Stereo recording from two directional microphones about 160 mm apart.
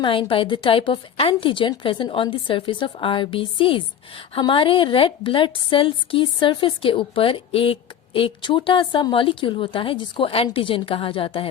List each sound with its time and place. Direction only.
0.0 s a woman's voice: 35° left (ahead or behind)